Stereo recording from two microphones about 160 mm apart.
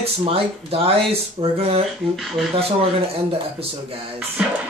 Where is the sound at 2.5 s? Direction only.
35° right (ahead or behind).